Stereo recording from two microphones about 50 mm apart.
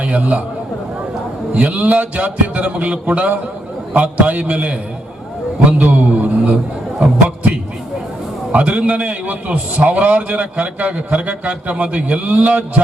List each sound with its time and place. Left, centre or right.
0.0 s a man's voice: right
1.5 s a man's voice: right
8.5 s a man's voice: right